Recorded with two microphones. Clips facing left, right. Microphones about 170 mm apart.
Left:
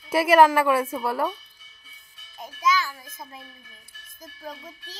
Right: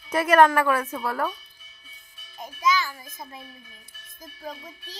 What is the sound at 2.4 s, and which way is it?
A woman's voice, 5° left (ahead or behind).